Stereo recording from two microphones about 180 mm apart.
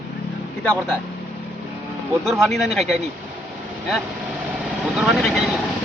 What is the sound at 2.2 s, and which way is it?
Speech, centre (ahead or behind).